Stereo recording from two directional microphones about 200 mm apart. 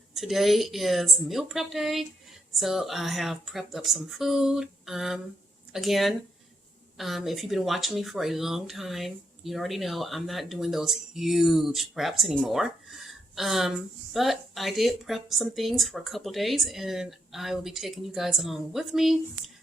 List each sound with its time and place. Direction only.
0.1 s speech: centre (ahead or behind)